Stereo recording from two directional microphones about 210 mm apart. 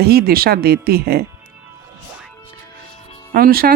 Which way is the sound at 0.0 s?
45° right (ahead or behind).